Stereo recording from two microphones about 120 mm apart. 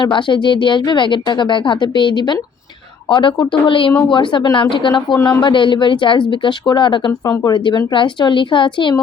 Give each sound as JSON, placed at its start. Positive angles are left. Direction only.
{"t": 0.0, "sound": "speech", "side_deg": 40}
{"t": 7.1, "sound": "speech", "side_deg": 30}